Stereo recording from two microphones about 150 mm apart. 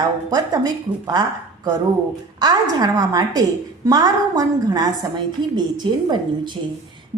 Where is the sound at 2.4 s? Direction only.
25° right (ahead or behind).